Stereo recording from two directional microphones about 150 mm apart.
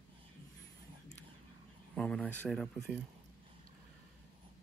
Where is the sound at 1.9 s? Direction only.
5° left (ahead or behind).